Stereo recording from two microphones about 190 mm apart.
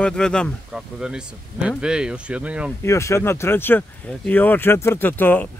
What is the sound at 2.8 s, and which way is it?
Speech, 15° left (ahead or behind).